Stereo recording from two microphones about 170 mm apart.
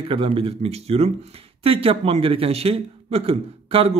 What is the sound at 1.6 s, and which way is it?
A man's voice, 35° right (ahead or behind).